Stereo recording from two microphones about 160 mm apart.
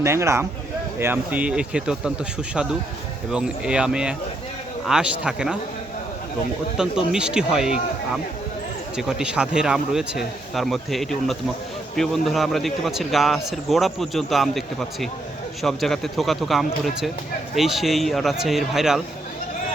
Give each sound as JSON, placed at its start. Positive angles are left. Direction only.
{"t": 0.0, "sound": "speech", "side_deg": -15}
{"t": 3.3, "sound": "speech", "side_deg": -5}
{"t": 6.7, "sound": "speech", "side_deg": -5}